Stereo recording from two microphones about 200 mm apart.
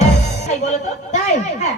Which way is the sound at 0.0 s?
35° left (ahead or behind).